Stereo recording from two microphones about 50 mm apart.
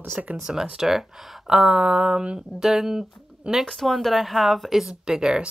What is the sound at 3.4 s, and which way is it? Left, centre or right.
Speech, right.